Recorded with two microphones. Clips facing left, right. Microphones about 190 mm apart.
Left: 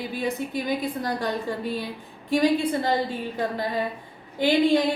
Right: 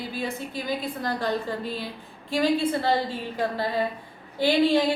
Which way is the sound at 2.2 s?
15° left (ahead or behind).